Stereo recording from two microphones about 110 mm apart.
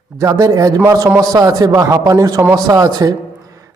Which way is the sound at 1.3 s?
35° right (ahead or behind).